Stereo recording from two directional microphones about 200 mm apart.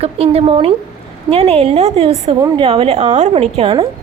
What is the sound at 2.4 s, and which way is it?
Speech, 15° right (ahead or behind).